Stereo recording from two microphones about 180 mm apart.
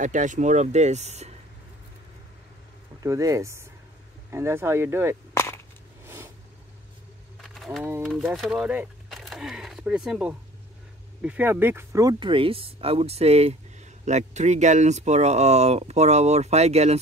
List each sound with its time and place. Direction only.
0.0 s speech: 45° right (ahead or behind)
3.0 s speech: 20° right (ahead or behind)
5.3 s cap gun: 15° left (ahead or behind)
6.0 s vehicle: 15° right (ahead or behind)
7.4 s a sound: centre (ahead or behind)
8.0 s speech: centre (ahead or behind); by 17.0 s 35° right (ahead or behind)